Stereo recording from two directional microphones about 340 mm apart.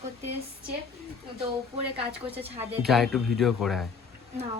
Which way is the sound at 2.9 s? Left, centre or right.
Centre.